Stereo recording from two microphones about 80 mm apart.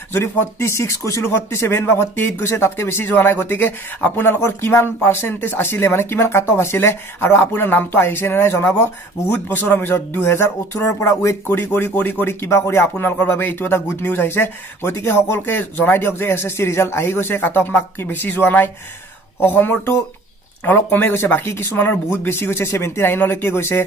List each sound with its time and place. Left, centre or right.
0.1 s speech: left